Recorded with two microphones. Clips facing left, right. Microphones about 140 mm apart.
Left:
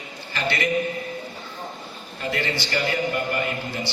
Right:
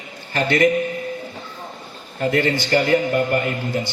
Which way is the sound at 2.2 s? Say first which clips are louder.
Right 8 dB; 45° right (ahead or behind).